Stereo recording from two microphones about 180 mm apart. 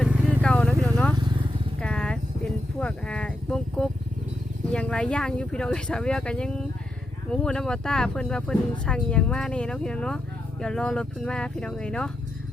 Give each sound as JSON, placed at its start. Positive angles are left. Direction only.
{"t": 0.0, "sound": "vehicle", "side_deg": 5}
{"t": 1.1, "sound": "vehicle", "side_deg": -25}
{"t": 1.8, "sound": "vehicle", "side_deg": 5}
{"t": 2.8, "sound": "a sound", "side_deg": 5}
{"t": 4.7, "sound": "speech", "side_deg": 5}